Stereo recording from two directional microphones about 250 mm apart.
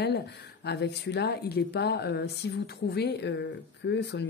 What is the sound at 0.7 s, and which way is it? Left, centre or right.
A woman's voice, left.